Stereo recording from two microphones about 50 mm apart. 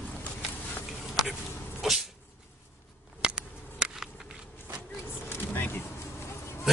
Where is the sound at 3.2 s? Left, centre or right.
Centre.